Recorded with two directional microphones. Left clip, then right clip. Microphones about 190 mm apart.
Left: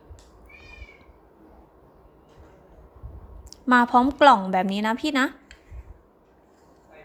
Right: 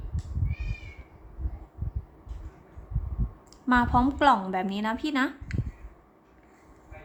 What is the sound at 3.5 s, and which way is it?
A woman's voice, 30° left (ahead or behind).